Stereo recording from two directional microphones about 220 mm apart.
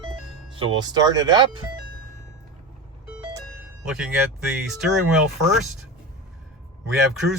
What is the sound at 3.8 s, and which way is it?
Speech, 5° right (ahead or behind).